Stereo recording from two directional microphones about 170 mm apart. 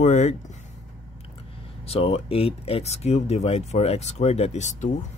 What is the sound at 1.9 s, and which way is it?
Speech, 35° left (ahead or behind).